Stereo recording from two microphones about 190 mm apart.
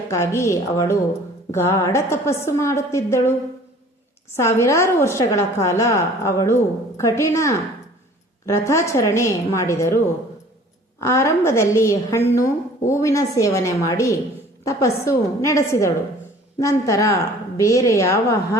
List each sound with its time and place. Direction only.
0.1 s a woman's voice: 15° left (ahead or behind)
4.4 s a woman's voice: 15° left (ahead or behind)
11.0 s a woman's voice: 15° left (ahead or behind)